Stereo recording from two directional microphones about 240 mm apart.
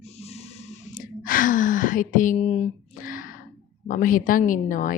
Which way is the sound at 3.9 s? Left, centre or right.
Left.